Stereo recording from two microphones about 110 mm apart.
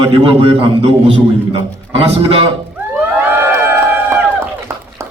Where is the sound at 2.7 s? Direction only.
15° right (ahead or behind).